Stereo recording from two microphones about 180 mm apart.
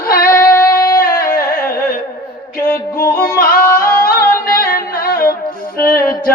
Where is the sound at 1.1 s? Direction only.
55° left (ahead or behind).